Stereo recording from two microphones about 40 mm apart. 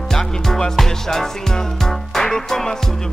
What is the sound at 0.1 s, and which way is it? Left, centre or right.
Music, centre.